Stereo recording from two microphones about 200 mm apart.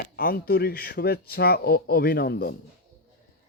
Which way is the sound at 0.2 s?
50° left (ahead or behind).